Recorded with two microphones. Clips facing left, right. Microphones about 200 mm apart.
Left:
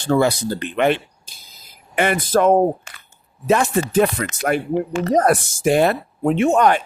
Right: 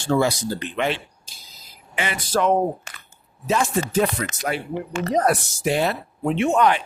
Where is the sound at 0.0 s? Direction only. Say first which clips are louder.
Left 3 dB; 55° left (ahead or behind).